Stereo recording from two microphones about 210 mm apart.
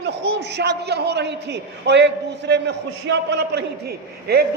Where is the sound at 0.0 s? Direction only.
55° right (ahead or behind).